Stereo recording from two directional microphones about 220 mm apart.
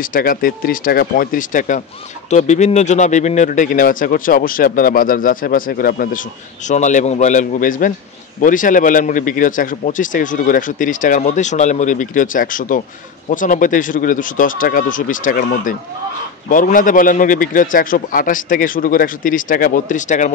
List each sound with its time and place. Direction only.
0.1 s a man's voice: 40° left (ahead or behind)